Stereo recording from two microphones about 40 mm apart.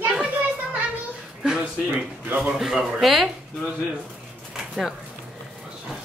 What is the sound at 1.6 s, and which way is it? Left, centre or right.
Speech, right.